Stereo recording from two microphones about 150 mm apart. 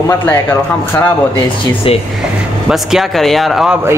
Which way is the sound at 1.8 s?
40° left (ahead or behind).